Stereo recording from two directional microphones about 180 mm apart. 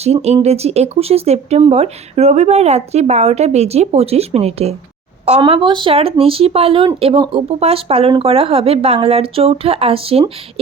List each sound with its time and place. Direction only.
0.0 s speech: 35° right (ahead or behind)